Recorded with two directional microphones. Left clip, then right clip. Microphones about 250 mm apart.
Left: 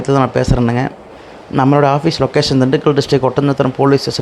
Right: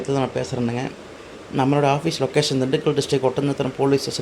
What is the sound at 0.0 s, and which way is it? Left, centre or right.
Speech, left.